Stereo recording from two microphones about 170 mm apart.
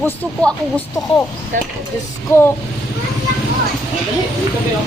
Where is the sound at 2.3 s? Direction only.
15° left (ahead or behind).